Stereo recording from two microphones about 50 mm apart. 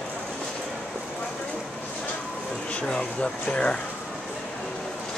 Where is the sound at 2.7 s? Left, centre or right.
Left.